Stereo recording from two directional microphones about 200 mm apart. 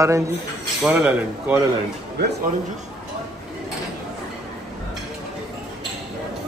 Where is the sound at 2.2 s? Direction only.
55° right (ahead or behind).